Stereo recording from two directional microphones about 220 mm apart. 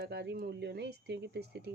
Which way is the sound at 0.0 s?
50° right (ahead or behind).